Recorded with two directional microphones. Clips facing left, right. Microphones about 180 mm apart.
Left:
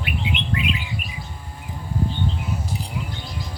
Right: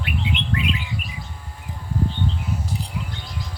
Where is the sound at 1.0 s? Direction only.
30° right (ahead or behind).